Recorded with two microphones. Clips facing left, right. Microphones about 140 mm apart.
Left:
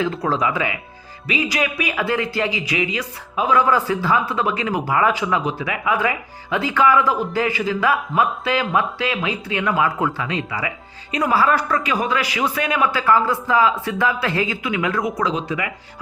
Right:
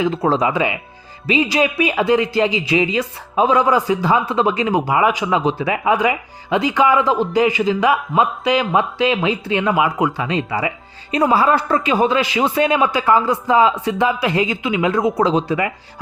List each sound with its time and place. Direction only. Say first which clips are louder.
0.0 s speech: right 4 dB; 20° right (ahead or behind)
6.0 s speech: right 4 dB; 15° right (ahead or behind); by 15.7 s 35° right (ahead or behind)